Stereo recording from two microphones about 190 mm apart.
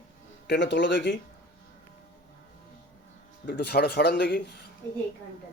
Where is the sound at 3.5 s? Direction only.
60° left (ahead or behind).